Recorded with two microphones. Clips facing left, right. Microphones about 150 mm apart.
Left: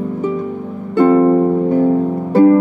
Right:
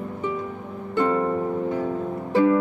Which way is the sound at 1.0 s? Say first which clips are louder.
Left 12 dB; 40° left (ahead or behind).